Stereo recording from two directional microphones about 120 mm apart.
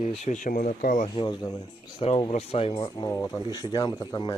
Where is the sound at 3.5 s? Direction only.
35° left (ahead or behind).